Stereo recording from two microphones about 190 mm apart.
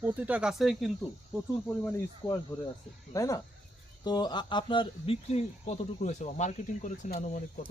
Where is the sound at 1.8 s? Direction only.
15° left (ahead or behind); by 7.4 s 40° left (ahead or behind).